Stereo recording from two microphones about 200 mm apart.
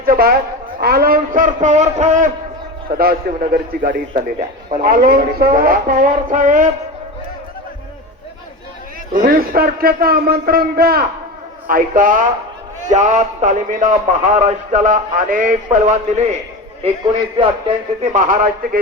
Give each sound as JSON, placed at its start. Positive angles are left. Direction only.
{"t": 0.0, "sound": "speech", "side_deg": -50}
{"t": 2.9, "sound": "speech", "side_deg": -50}
{"t": 9.1, "sound": "speech", "side_deg": -45}
{"t": 18.0, "sound": "speech", "side_deg": -40}